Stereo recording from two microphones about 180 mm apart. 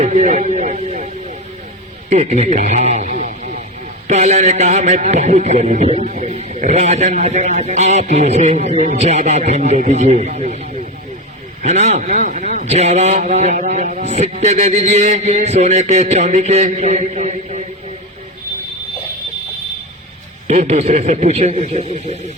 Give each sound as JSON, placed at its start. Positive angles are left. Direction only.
{"t": 0.0, "sound": "a man's voice", "side_deg": -45}
{"t": 11.6, "sound": "a man's voice", "side_deg": -40}
{"t": 20.5, "sound": "a man's voice", "side_deg": -35}